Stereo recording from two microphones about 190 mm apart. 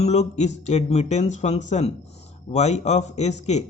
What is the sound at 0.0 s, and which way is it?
A man's voice, 35° left (ahead or behind).